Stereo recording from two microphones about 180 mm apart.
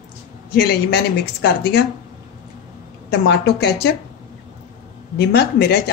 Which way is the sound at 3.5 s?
65° left (ahead or behind).